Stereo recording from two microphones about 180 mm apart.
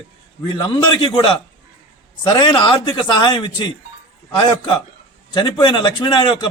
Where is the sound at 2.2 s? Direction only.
25° left (ahead or behind).